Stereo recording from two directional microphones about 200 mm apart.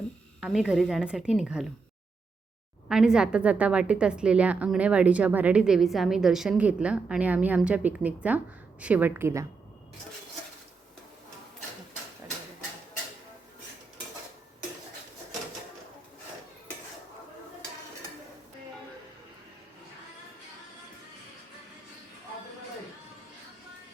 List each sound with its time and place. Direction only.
0.3 s a woman's voice: 5° right (ahead or behind)
2.9 s a woman's voice: 5° right (ahead or behind)